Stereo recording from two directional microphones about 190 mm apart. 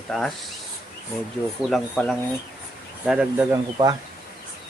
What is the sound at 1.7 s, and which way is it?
Speech, 5° left (ahead or behind).